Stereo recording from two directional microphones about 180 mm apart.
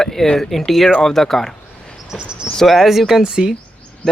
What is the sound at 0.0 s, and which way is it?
Speech, 5° left (ahead or behind).